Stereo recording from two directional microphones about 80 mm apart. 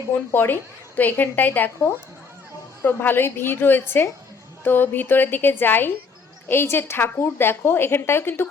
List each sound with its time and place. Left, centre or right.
0.3 s a woman's voice: left